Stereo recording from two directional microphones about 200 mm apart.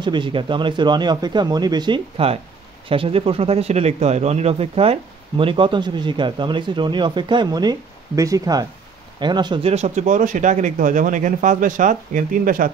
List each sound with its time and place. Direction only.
0.0 s speech: 25° right (ahead or behind); by 12.7 s 45° right (ahead or behind)